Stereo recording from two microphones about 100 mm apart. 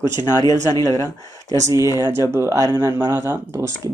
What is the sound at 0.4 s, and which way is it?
Speech, 40° left (ahead or behind).